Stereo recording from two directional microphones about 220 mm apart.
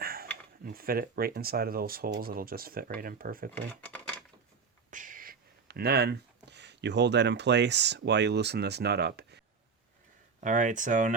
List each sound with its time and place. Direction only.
0.0 s a sound: 40° right (ahead or behind)
0.6 s speech: 40° right (ahead or behind)
4.9 s speech: 35° right (ahead or behind)
10.4 s speech: 35° right (ahead or behind)